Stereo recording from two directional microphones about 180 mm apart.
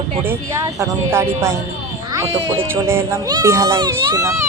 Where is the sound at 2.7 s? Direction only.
15° right (ahead or behind).